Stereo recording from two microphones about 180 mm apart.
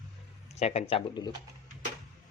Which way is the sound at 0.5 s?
35° left (ahead or behind).